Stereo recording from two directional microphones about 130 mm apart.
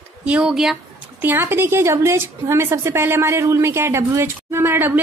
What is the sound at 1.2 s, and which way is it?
A woman's voice, 15° right (ahead or behind).